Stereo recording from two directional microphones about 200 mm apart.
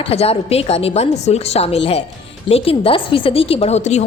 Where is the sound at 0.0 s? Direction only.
30° left (ahead or behind).